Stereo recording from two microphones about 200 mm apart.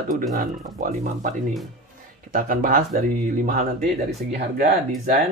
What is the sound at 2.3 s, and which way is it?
Speech, 45° right (ahead or behind).